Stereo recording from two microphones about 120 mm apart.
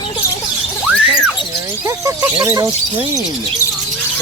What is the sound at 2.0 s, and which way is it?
Speech, 25° right (ahead or behind).